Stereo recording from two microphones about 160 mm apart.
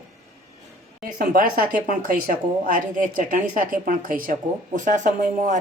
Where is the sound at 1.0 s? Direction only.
60° right (ahead or behind).